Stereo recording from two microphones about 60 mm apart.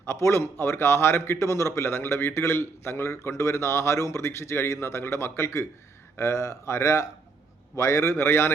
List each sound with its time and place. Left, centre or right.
0.0 s a man's voice: left